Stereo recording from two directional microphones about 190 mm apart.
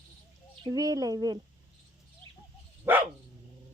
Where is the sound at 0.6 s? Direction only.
20° right (ahead or behind).